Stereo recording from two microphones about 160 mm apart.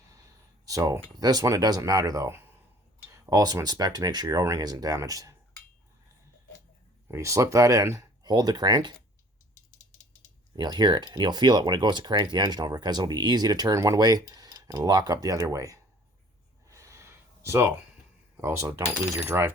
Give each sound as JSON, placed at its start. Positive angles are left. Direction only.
{"t": 0.6, "sound": "speech", "side_deg": -20}
{"t": 7.1, "sound": "speech", "side_deg": -20}
{"t": 10.5, "sound": "speech", "side_deg": -25}
{"t": 16.6, "sound": "gasp", "side_deg": -20}
{"t": 18.3, "sound": "speech", "side_deg": -15}
{"t": 19.1, "sound": "coin", "side_deg": -15}